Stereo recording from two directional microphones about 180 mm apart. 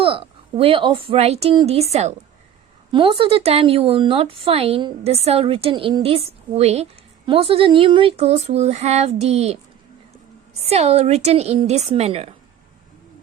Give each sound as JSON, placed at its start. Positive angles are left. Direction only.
{"t": 0.0, "sound": "a woman's voice", "side_deg": -30}
{"t": 10.7, "sound": "speech", "side_deg": -35}